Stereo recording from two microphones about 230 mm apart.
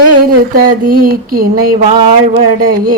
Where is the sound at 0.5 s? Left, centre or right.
Right.